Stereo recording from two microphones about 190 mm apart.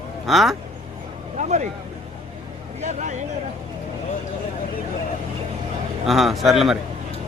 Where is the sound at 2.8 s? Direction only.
40° right (ahead or behind).